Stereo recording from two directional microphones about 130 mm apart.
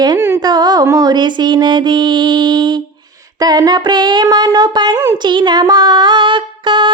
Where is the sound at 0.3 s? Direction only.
30° right (ahead or behind).